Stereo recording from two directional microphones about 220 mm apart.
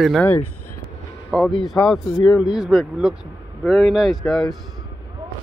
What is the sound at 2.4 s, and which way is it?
Speech, 5° right (ahead or behind).